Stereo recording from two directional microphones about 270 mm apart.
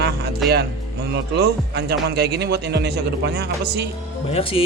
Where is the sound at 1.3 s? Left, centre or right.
Right.